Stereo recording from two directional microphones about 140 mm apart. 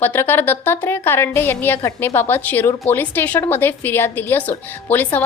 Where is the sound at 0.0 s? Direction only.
15° left (ahead or behind).